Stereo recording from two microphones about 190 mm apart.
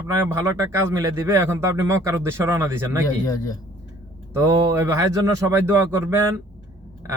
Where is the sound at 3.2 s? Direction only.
20° left (ahead or behind).